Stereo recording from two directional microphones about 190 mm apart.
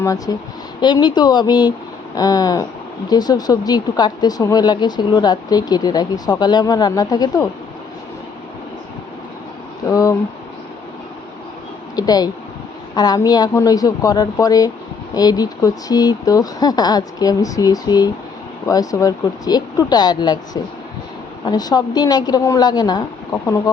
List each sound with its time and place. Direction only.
0.0 s speech: 20° left (ahead or behind)
9.9 s speech: 20° left (ahead or behind)
11.9 s speech: 20° left (ahead or behind)